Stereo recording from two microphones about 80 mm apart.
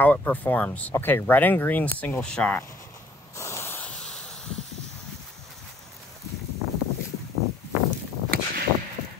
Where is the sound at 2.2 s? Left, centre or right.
Centre.